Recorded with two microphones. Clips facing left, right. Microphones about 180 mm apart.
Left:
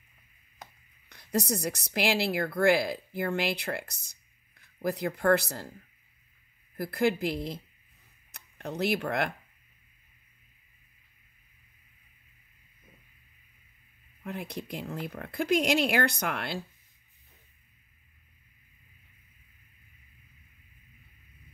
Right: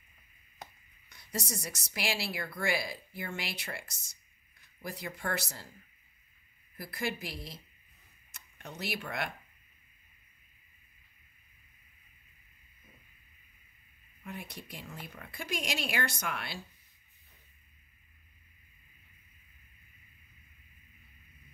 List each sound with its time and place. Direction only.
1.0 s a woman's voice: 60° left (ahead or behind)
6.9 s a woman's voice: 60° left (ahead or behind)
8.5 s a woman's voice: 60° left (ahead or behind)
14.2 s a woman's voice: 60° left (ahead or behind)